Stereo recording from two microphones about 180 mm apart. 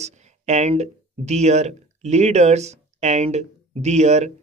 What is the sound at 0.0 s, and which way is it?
Speech, 40° right (ahead or behind).